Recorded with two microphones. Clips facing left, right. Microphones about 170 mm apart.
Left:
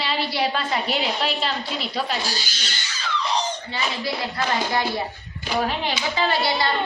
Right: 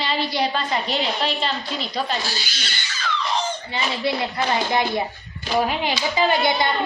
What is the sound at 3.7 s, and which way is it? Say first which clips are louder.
Speech: right 3 dB; 25° right (ahead or behind).